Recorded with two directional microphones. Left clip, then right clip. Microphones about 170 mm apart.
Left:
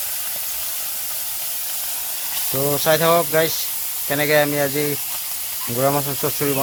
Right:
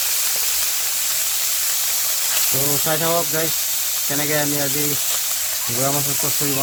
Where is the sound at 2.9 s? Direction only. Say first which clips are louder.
Left 6 dB; 30° left (ahead or behind).